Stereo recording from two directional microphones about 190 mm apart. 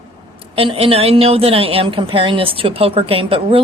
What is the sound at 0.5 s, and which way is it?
A woman's voice, 30° right (ahead or behind).